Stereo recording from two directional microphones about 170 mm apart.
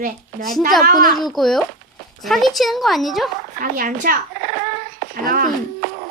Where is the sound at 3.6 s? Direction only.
55° right (ahead or behind).